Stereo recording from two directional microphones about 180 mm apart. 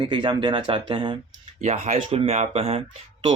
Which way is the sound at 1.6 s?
40° right (ahead or behind).